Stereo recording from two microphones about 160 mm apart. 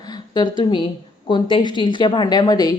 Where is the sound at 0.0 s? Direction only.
25° left (ahead or behind).